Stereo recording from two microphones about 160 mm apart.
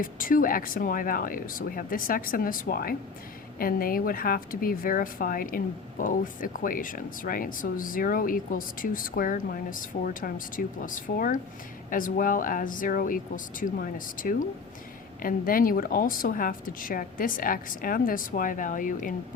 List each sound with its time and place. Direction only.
0.0 s speech: 60° left (ahead or behind)